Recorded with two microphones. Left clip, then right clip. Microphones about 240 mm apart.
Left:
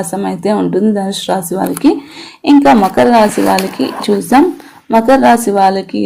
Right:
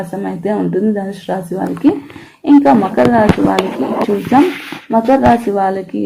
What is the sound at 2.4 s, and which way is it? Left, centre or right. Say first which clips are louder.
Speech: left 2 dB; left.